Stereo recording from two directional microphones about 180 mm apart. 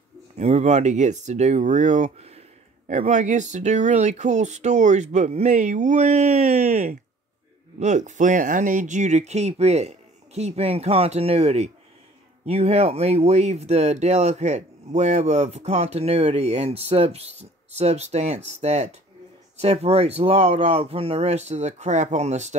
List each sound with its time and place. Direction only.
0.4 s speech: 40° right (ahead or behind)